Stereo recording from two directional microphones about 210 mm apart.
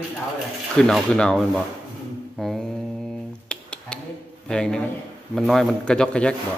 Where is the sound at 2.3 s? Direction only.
Centre (ahead or behind).